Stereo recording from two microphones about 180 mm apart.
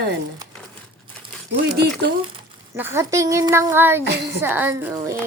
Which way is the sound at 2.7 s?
15° right (ahead or behind).